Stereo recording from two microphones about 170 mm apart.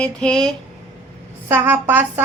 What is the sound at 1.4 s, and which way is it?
Speech, 15° right (ahead or behind).